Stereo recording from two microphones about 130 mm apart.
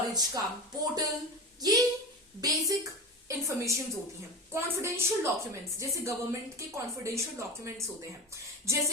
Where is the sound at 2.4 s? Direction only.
25° right (ahead or behind).